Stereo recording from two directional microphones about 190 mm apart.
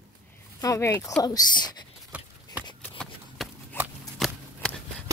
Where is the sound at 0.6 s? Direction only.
15° left (ahead or behind).